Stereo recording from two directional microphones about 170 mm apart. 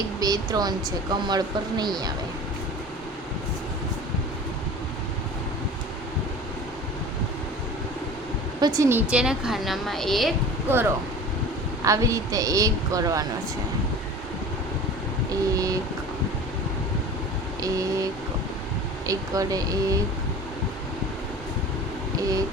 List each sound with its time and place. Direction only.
0.2 s speech: 20° right (ahead or behind)
8.6 s a woman's voice: 20° right (ahead or behind); by 10.3 s centre (ahead or behind)
10.7 s speech: 10° right (ahead or behind)
15.3 s speech: 20° right (ahead or behind)
17.6 s speech: 20° right (ahead or behind)